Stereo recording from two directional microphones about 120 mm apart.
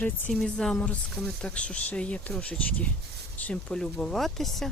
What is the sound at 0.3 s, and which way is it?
Speech, 5° left (ahead or behind).